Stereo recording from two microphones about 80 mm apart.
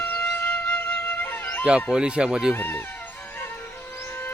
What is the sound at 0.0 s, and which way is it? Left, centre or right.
Music, left.